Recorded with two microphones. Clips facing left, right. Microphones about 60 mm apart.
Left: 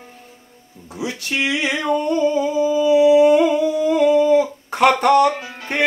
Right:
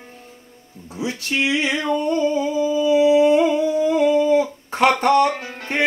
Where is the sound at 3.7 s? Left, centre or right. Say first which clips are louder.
Even; right.